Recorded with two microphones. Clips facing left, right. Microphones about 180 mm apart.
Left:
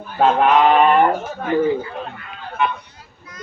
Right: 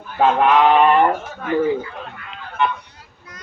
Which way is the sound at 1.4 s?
30° left (ahead or behind).